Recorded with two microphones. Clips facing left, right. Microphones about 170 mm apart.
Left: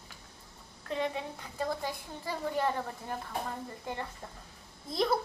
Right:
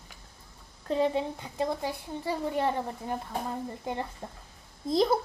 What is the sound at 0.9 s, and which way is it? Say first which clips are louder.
A woman's voice: right 7 dB; 30° right (ahead or behind).